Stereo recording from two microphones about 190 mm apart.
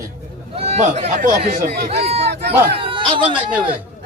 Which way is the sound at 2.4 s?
60° right (ahead or behind).